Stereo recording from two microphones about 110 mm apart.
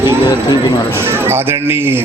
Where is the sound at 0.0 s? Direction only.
20° right (ahead or behind).